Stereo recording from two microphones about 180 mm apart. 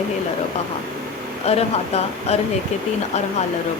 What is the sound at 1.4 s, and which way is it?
Speech, 35° left (ahead or behind).